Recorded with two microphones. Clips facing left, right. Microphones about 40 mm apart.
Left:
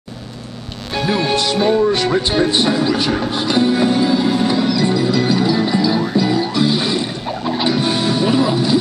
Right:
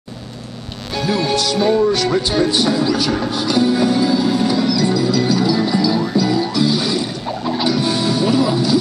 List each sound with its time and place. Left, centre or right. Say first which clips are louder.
0.9 s music: left 1 dB; left
2.2 s speech: left 1 dB; left
3.3 s music: even; left